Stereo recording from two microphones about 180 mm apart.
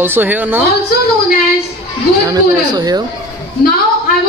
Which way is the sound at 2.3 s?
20° right (ahead or behind).